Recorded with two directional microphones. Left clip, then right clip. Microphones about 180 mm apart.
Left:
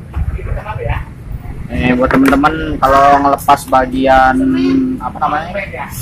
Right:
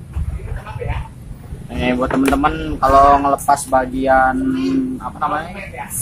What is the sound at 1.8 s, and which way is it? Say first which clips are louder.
Speech: left 6 dB; 25° right (ahead or behind).